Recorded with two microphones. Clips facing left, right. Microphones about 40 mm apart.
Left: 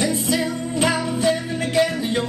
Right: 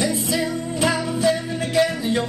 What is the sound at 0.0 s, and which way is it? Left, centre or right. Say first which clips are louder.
Music: left 1 dB; centre.